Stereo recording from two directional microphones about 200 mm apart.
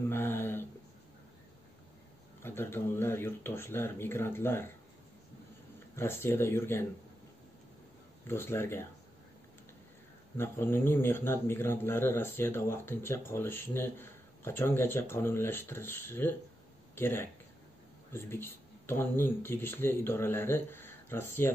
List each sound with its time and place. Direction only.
0.1 s a sound: 10° left (ahead or behind)
2.4 s speech: 10° left (ahead or behind)
5.9 s speech: 10° left (ahead or behind)
8.3 s speech: 10° left (ahead or behind)
10.3 s speech: 10° left (ahead or behind)